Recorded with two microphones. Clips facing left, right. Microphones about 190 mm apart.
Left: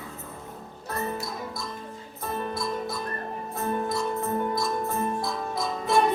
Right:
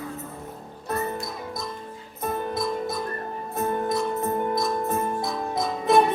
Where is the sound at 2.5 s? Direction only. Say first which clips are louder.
Right 3 dB; 20° right (ahead or behind).